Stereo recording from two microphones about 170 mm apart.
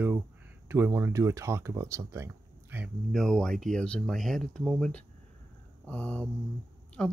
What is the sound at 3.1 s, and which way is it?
Speech, 5° left (ahead or behind).